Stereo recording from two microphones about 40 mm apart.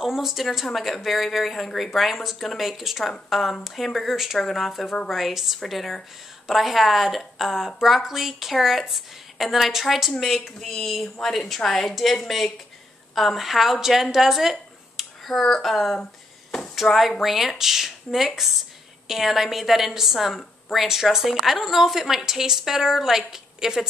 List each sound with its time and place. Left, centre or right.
0.0 s a woman's voice: centre
10.1 s a woman's voice: centre
14.1 s a sound: centre
15.2 s a woman's voice: centre
16.8 s speech: left
17.2 s a woman's voice: centre